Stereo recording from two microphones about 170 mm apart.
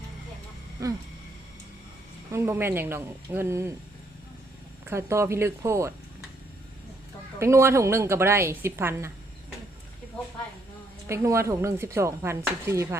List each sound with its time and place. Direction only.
0.8 s a sound: 20° right (ahead or behind)
2.3 s speech: 15° right (ahead or behind)
4.9 s speech: 15° right (ahead or behind)
7.3 s speech: 15° right (ahead or behind)
11.1 s speech: 15° right (ahead or behind)